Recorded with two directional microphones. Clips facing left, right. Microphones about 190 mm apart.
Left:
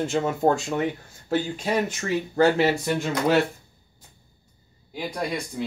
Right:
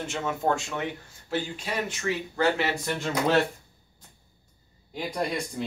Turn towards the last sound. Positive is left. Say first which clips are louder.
# left 1 dB
turn(degrees=0)  # may be behind; listen again after turning